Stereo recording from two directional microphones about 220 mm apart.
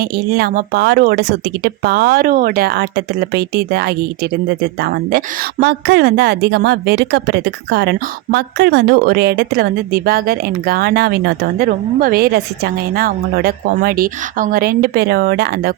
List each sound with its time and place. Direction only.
0.0 s speech: 45° right (ahead or behind)